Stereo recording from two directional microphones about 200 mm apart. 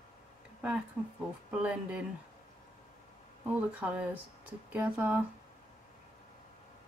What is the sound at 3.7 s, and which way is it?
Speech, 5° right (ahead or behind).